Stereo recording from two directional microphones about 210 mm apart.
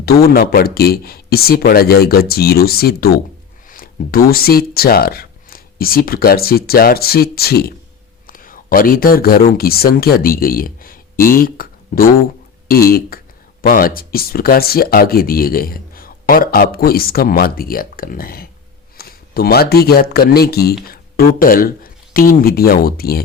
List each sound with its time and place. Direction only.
0.0 s speech: 50° left (ahead or behind)